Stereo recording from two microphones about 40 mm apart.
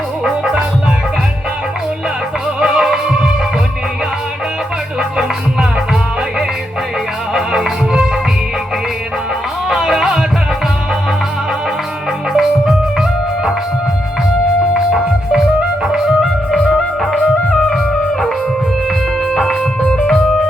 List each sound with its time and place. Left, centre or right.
2.6 s music: centre
4.9 s music: centre
7.3 s music: centre
9.6 s music: centre
12.3 s music: centre
14.9 s music: centre
16.6 s music: centre
19.3 s music: centre
19.8 s music: left